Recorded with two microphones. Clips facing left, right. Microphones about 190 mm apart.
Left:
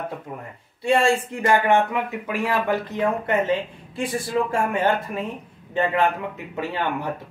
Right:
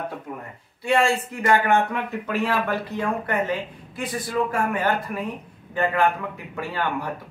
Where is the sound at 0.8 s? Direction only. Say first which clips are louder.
Left 2 dB; 25° left (ahead or behind).